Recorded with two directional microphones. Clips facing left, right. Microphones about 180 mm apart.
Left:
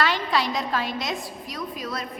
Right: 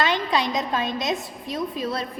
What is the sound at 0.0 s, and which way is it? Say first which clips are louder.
A woman's voice: right 1 dB; 20° right (ahead or behind).